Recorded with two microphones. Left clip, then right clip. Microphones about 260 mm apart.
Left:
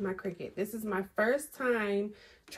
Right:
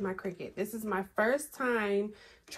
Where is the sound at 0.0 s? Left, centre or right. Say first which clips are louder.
Even; centre.